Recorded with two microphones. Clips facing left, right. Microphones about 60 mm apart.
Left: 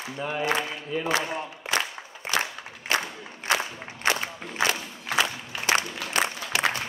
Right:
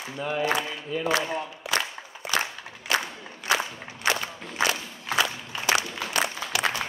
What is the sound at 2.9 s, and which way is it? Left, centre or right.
Crowd, left.